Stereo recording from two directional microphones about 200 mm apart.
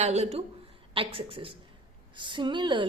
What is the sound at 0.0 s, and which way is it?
A woman's voice, 35° right (ahead or behind).